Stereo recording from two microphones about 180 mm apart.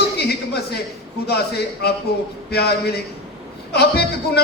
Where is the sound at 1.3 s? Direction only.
65° left (ahead or behind).